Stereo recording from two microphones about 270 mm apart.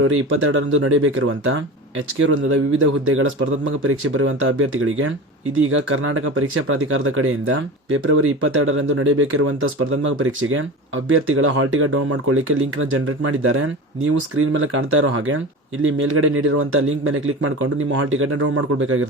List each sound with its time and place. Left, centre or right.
0.0 s speech: right